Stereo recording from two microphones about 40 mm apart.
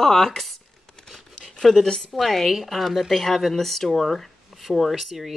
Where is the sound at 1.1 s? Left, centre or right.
Centre.